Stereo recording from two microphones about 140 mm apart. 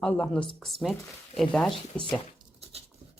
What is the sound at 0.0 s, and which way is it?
Speech, 10° left (ahead or behind).